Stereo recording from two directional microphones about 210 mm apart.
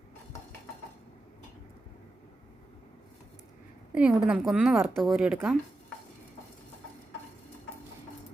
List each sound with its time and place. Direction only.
3.9 s a woman's voice: 5° right (ahead or behind)